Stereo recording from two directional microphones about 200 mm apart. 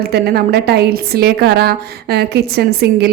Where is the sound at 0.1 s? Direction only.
55° right (ahead or behind).